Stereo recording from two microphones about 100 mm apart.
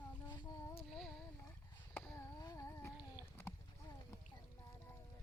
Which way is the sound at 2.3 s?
35° left (ahead or behind).